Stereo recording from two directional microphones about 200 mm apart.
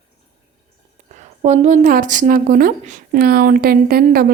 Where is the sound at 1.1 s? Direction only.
35° right (ahead or behind).